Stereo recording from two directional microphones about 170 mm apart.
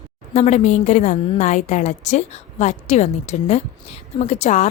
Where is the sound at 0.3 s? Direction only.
45° left (ahead or behind).